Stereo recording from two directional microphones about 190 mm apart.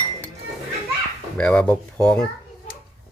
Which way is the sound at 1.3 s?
5° left (ahead or behind).